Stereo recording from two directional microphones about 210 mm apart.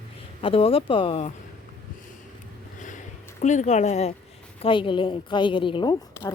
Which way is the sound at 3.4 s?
35° left (ahead or behind).